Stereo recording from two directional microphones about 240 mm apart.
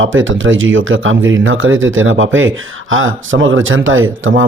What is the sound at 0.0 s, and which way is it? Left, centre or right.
A man's voice, right.